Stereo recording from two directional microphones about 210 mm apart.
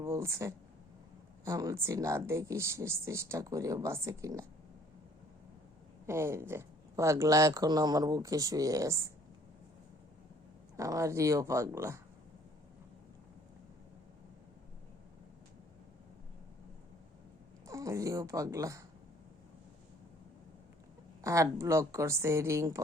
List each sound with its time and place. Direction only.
0.0 s speech: 15° right (ahead or behind)
6.1 s speech: 10° right (ahead or behind)
10.8 s speech: 15° right (ahead or behind)
17.7 s speech: 15° right (ahead or behind)
21.2 s speech: 15° right (ahead or behind)